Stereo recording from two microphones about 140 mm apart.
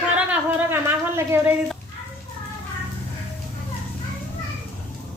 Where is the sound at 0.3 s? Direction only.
15° right (ahead or behind).